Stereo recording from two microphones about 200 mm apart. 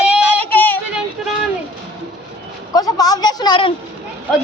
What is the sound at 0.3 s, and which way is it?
Child singing, 10° left (ahead or behind).